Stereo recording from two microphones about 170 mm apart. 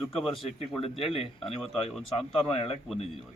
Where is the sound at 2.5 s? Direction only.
35° left (ahead or behind).